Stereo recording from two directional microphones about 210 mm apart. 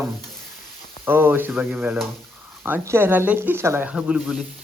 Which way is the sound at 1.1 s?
10° right (ahead or behind).